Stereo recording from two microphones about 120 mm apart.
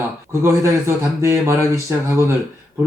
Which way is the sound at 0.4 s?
25° right (ahead or behind).